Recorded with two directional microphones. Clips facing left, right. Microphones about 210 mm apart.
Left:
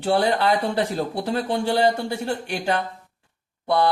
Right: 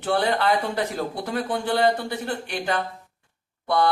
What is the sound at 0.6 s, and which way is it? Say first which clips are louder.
Speech: left 3 dB; 30° left (ahead or behind).